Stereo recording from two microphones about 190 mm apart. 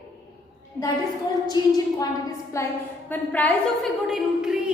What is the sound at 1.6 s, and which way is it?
Speech, 20° left (ahead or behind).